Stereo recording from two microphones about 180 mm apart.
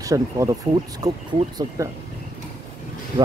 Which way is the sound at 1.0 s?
40° right (ahead or behind).